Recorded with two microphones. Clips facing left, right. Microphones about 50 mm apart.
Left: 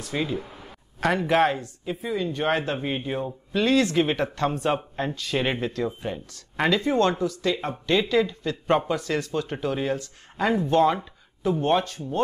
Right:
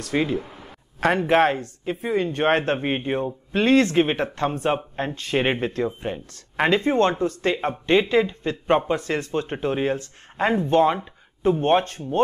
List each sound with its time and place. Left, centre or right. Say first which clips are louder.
0.4 s a sound: right 2 dB; centre
1.0 s speech: right 3 dB; right
1.6 s speech: right 3 dB; right